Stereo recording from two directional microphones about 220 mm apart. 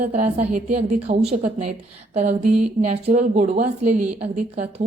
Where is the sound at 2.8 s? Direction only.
30° right (ahead or behind).